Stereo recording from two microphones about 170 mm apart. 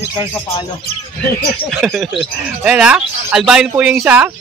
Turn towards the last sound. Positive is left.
turn(degrees=-10)  # may be behind; listen again after turning